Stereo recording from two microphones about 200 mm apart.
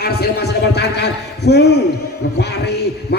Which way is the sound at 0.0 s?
50° left (ahead or behind).